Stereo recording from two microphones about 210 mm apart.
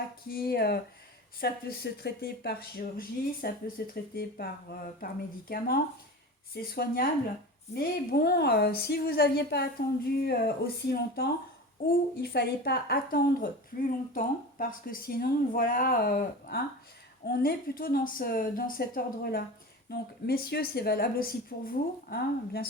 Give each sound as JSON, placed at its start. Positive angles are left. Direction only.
{"t": 0.3, "sound": "a woman's voice", "side_deg": 45}